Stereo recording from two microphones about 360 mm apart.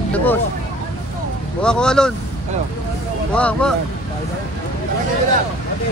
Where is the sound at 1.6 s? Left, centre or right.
Centre.